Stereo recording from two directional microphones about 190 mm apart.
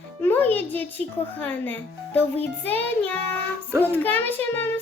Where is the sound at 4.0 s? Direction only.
10° left (ahead or behind).